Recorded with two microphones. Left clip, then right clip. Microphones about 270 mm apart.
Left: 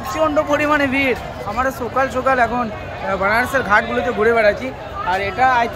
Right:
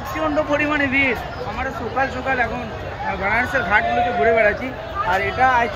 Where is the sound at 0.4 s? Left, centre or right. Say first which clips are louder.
Left 2 dB; centre.